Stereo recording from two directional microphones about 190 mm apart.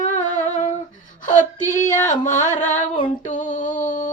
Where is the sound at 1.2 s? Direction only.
40° left (ahead or behind).